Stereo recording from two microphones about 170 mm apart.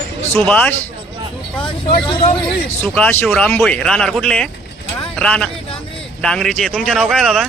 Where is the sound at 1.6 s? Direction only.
30° left (ahead or behind).